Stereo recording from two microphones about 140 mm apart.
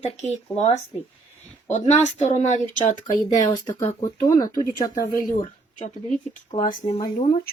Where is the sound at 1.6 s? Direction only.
60° left (ahead or behind).